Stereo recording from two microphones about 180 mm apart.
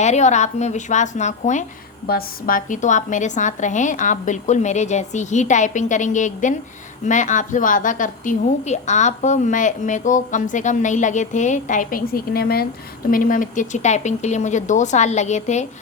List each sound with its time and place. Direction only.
0.0 s speech: 40° left (ahead or behind)
2.0 s a woman's voice: 55° left (ahead or behind)